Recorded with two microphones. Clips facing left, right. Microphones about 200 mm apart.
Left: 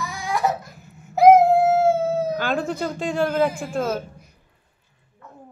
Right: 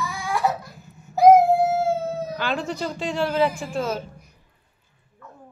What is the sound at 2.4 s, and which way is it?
Speech, 50° left (ahead or behind).